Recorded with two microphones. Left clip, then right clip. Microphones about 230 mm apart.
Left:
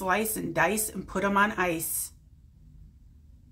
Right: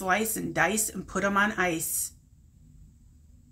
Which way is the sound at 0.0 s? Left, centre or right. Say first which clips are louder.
Even; centre.